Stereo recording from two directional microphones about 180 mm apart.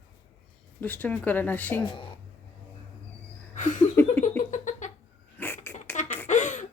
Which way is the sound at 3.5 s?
45° left (ahead or behind).